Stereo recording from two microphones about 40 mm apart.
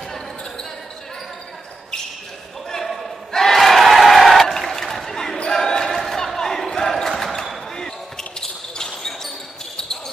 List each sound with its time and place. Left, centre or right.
2.7 s a sound: centre
3.3 s crowd: centre
5.1 s basketball bounce: centre
5.9 s basketball bounce: centre